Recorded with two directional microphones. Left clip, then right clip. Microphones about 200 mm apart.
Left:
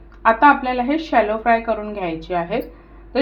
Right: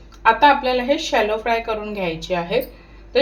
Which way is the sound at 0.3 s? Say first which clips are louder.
Left 2 dB; 30° left (ahead or behind).